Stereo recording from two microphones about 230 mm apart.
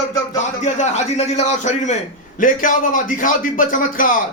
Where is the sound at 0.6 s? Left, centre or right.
Left.